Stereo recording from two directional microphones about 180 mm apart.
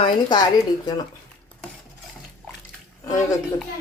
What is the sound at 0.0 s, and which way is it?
Speech, 25° left (ahead or behind).